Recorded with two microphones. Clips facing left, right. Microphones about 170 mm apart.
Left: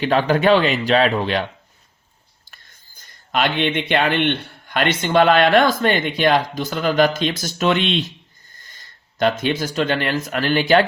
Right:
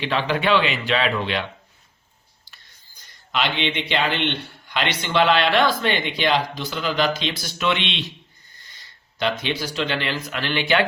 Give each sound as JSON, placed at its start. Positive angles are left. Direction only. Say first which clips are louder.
{"t": 0.0, "sound": "speech", "louder": "left 6 dB", "side_deg": 45}
{"t": 2.4, "sound": "speech", "louder": "left 3 dB", "side_deg": 50}